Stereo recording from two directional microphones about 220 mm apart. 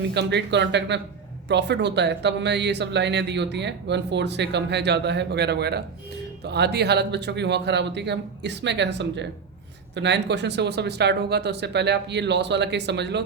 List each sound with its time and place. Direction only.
0.0 s speech: 50° right (ahead or behind)